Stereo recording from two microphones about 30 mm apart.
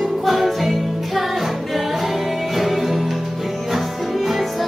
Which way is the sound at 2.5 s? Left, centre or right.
Centre.